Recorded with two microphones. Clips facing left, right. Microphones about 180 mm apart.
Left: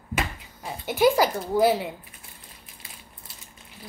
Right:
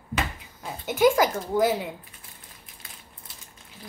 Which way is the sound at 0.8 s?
20° right (ahead or behind).